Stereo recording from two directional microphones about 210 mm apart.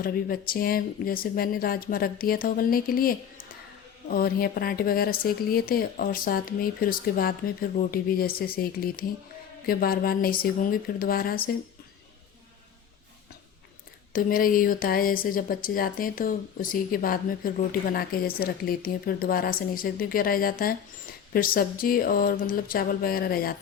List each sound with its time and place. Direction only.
0.0 s speech: 45° left (ahead or behind)
14.1 s speech: 45° left (ahead or behind)